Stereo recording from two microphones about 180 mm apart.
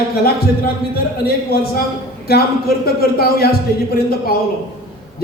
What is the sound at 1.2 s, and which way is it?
Speech, 55° left (ahead or behind).